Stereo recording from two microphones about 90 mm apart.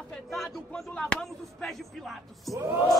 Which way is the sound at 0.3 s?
5° left (ahead or behind).